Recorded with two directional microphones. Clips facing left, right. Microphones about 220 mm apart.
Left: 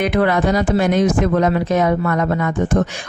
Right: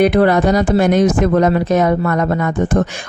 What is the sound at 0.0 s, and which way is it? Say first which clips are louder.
A woman's voice: right 5 dB; 35° right (ahead or behind).